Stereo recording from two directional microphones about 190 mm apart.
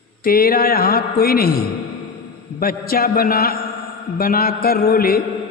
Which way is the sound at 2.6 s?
50° left (ahead or behind).